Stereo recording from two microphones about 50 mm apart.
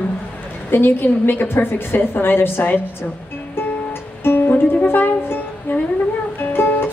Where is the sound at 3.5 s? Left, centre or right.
Left.